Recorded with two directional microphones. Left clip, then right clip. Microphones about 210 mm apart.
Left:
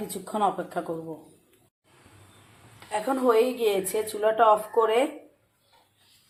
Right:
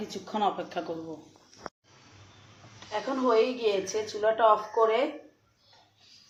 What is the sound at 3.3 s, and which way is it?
Speech, 50° left (ahead or behind).